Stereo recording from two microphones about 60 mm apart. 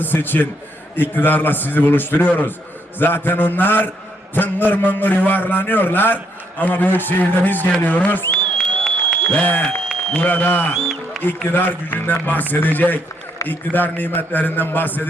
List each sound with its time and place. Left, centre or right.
0.0 s a man's voice: left
8.5 s a sound: centre
9.2 s speech: left
10.8 s speech: centre
11.5 s a man's voice: left